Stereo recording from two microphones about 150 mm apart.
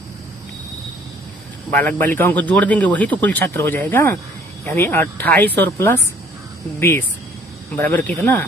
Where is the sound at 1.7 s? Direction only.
10° left (ahead or behind).